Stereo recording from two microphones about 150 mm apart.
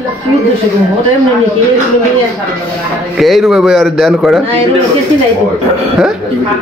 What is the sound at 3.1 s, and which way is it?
A man's voice, centre (ahead or behind).